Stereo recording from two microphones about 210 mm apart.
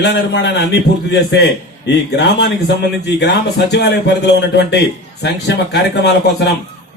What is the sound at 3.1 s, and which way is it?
A man's voice, 55° left (ahead or behind).